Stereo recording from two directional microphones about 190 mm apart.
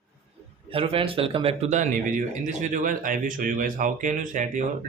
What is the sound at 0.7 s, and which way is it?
Speech, 30° right (ahead or behind).